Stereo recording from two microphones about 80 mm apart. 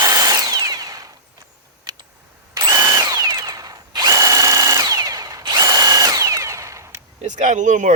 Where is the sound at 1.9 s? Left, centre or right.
Right.